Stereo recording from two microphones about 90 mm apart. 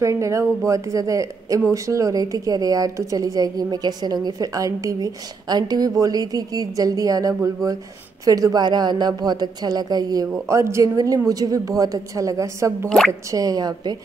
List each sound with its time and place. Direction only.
0.0 s a woman's voice: 35° right (ahead or behind)
10.5 s speech: 30° right (ahead or behind)
13.3 s a woman's voice: 45° right (ahead or behind)